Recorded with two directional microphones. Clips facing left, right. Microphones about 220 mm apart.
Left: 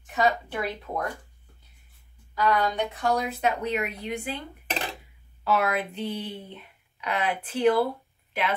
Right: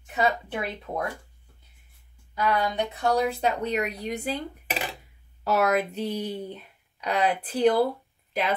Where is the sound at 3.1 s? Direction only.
30° right (ahead or behind).